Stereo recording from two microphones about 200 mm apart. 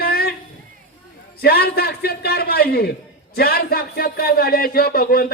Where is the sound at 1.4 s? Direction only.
50° left (ahead or behind).